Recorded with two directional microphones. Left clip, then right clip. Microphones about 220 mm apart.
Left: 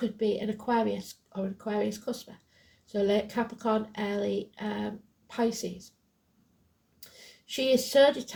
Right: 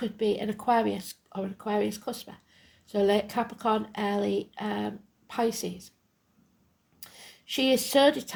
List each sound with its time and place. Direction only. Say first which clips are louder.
0.0 s speech: right 1 dB; 40° right (ahead or behind)
7.0 s speech: right 3 dB; 40° right (ahead or behind)